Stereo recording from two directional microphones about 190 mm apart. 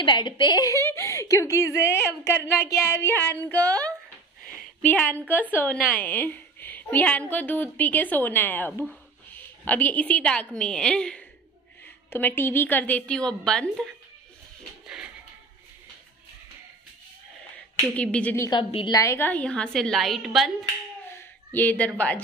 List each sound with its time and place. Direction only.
0.0 s a woman's voice: 25° left (ahead or behind); by 13.8 s 5° left (ahead or behind)
17.8 s a woman's voice: 5° left (ahead or behind)
18.5 s a woman's voice: 25° left (ahead or behind); by 20.5 s centre (ahead or behind)
21.5 s a woman's voice: 10° left (ahead or behind)